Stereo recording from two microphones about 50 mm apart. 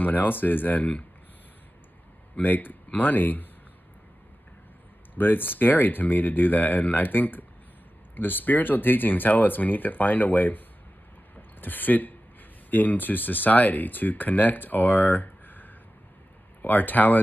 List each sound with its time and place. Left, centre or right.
0.0 s speech: left
2.3 s speech: left
5.1 s speech: left
11.3 s a sound: left
12.7 s speech: left